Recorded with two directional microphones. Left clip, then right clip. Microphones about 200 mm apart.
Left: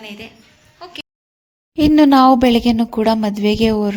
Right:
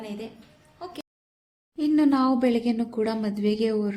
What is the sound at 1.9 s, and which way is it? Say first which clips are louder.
A woman's voice: left 12 dB; 45° left (ahead or behind).